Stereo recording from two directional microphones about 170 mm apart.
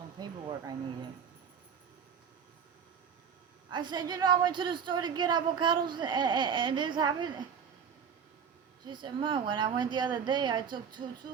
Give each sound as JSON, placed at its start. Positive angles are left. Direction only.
{"t": 0.2, "sound": "a sound", "side_deg": -25}
{"t": 3.7, "sound": "a woman's voice", "side_deg": -25}
{"t": 8.9, "sound": "a woman's voice", "side_deg": -25}